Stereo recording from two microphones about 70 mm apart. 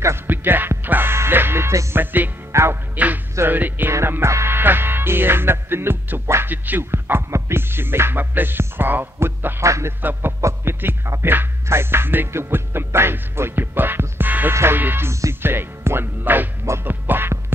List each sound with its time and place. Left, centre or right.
0.3 s music: right
2.0 s music: right
2.5 s music: right
3.4 s music: right
3.9 s music: right
9.6 s a sound: right
10.4 s music: right
14.5 s music: right